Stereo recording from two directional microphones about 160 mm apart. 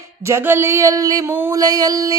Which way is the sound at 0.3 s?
15° right (ahead or behind).